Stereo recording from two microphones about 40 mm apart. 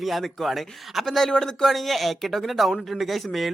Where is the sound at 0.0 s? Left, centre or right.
Centre.